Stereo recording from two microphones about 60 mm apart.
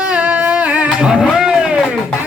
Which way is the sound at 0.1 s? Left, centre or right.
Right.